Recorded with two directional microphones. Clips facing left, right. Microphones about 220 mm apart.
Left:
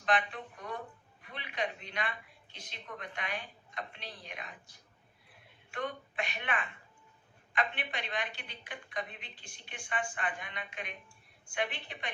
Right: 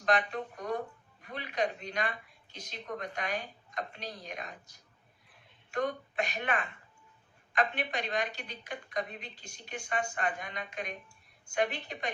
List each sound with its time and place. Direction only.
0.0 s speech: 40° right (ahead or behind)